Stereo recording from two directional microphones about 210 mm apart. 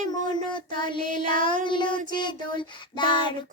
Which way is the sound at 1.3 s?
35° right (ahead or behind).